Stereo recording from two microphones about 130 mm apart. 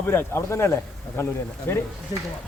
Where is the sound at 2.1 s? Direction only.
35° left (ahead or behind).